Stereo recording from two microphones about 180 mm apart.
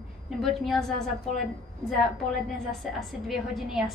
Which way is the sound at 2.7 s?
Centre (ahead or behind).